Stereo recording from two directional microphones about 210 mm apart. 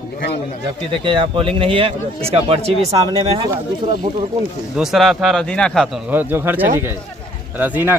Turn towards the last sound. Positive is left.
turn(degrees=-10)  # may be behind; listen again after turning